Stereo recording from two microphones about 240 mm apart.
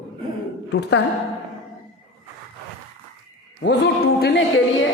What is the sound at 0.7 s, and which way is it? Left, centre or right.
Speech, left.